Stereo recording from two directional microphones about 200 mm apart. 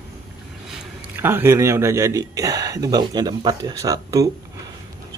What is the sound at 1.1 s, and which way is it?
Speech, 10° right (ahead or behind).